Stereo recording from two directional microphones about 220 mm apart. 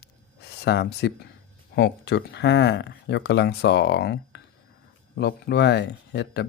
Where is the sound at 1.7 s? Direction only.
50° left (ahead or behind).